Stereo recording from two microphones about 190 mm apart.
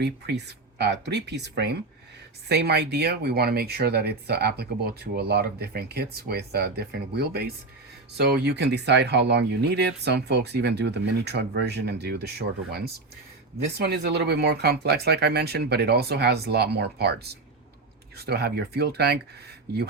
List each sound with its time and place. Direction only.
0.0 s speech: 60° right (ahead or behind)
13.7 s speech: 60° right (ahead or behind)